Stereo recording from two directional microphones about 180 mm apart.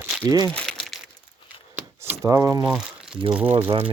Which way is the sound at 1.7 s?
10° right (ahead or behind).